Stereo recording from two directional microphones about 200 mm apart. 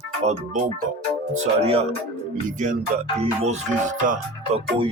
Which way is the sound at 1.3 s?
30° right (ahead or behind).